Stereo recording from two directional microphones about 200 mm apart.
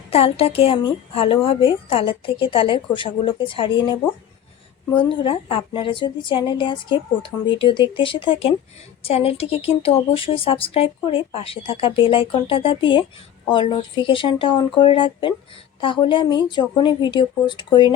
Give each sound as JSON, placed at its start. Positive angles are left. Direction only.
{"t": 0.1, "sound": "speech", "side_deg": 30}
{"t": 4.9, "sound": "speech", "side_deg": 25}